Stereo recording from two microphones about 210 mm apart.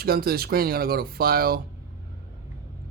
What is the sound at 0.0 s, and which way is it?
Speech, 45° right (ahead or behind).